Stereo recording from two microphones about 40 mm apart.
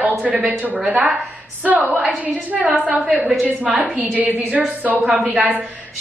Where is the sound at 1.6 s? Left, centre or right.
Right.